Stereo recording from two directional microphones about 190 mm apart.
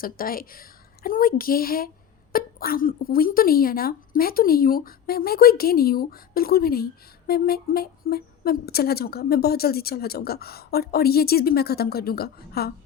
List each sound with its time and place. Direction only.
0.0 s a woman's voice: 50° left (ahead or behind)